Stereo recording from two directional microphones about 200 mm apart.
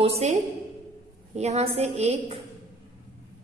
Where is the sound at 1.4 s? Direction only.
35° right (ahead or behind).